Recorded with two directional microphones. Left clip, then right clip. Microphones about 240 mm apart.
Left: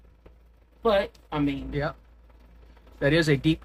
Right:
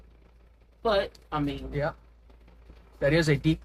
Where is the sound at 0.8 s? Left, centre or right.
Left.